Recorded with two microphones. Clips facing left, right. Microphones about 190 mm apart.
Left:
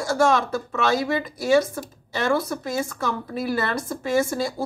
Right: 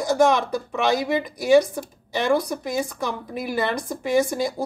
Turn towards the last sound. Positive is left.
turn(degrees=-15)  # may be behind; listen again after turning